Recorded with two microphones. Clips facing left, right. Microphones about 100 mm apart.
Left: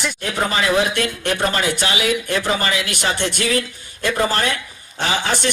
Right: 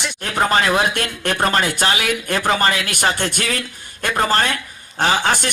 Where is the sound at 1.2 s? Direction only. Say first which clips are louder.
Right 4 dB; 50° right (ahead or behind).